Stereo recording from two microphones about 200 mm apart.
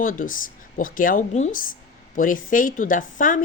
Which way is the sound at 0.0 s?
40° left (ahead or behind).